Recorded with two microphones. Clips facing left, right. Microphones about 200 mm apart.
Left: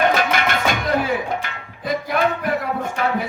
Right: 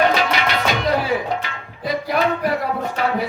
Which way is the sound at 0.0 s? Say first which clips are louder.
Even; 50° left (ahead or behind).